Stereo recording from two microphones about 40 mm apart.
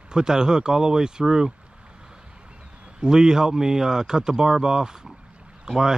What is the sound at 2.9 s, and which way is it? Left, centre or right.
Speech, centre.